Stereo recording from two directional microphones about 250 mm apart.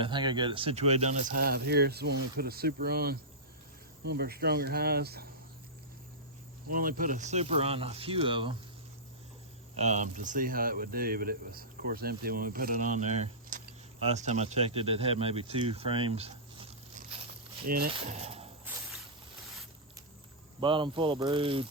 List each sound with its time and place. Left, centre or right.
0.0 s speech: centre
1.4 s speech: right
6.7 s speech: right
9.7 s speech: right
17.9 s speech: right
20.6 s speech: centre